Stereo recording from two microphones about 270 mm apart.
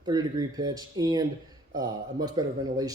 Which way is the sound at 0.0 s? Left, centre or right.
Centre.